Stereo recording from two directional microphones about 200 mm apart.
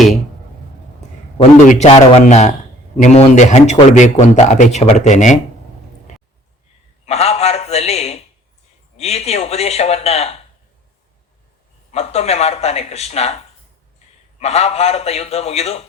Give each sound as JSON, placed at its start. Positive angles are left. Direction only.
{"t": 1.4, "sound": "speech", "side_deg": 40}
{"t": 7.0, "sound": "a sound", "side_deg": 30}
{"t": 9.0, "sound": "speech", "side_deg": 30}
{"t": 11.9, "sound": "speech", "side_deg": 30}
{"t": 14.3, "sound": "speech", "side_deg": 30}